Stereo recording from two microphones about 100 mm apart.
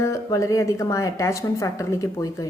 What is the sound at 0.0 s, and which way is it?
A woman's voice, 30° left (ahead or behind).